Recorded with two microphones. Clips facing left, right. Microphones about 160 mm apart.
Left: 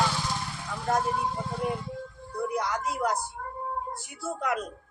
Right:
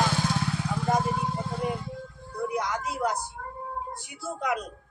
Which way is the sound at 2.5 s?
5° right (ahead or behind).